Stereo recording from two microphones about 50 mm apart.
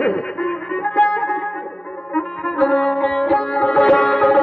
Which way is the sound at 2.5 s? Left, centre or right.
Centre.